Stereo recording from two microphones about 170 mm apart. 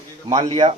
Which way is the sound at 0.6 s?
30° right (ahead or behind).